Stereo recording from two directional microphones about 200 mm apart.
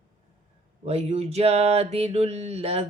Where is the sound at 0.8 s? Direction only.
30° right (ahead or behind).